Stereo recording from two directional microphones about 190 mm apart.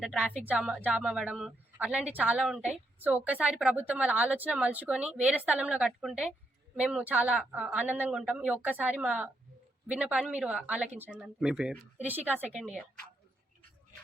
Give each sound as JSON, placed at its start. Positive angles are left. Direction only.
{"t": 0.0, "sound": "a woman's voice", "side_deg": -5}